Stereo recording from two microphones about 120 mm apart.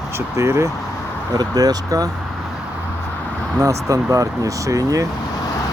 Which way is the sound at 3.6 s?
25° right (ahead or behind).